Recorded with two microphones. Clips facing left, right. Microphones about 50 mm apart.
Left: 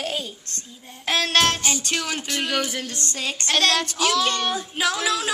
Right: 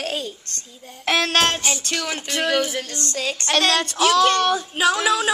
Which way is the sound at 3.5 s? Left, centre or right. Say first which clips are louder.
Right 1 dB; centre.